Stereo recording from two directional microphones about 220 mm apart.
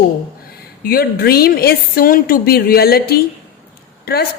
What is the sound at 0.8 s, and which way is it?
A woman's voice, 45° left (ahead or behind).